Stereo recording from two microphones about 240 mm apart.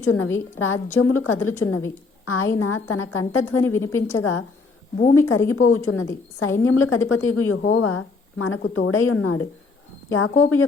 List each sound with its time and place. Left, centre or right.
0.0 s a woman's voice: left